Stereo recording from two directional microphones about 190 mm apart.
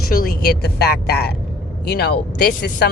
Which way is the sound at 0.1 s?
50° left (ahead or behind).